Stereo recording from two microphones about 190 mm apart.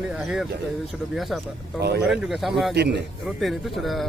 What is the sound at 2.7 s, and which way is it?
Speech, 60° right (ahead or behind).